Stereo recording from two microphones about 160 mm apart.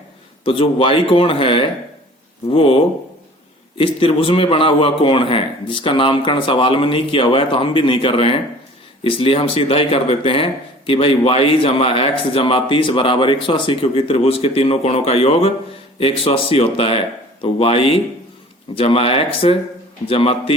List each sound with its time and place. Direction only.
0.4 s speech: 35° left (ahead or behind)